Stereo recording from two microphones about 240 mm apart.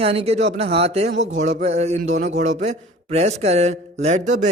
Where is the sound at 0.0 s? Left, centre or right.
Right.